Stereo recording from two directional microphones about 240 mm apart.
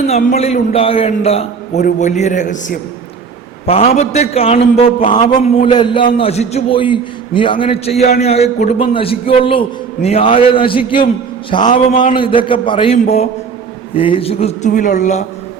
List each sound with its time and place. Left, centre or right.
0.3 s a man's voice: left